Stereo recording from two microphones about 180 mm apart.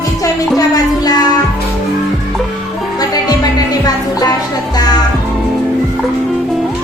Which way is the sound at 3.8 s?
20° left (ahead or behind).